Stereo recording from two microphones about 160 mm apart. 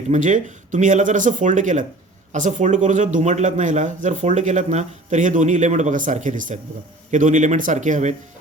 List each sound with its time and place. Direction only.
0.1 s speech: 50° right (ahead or behind)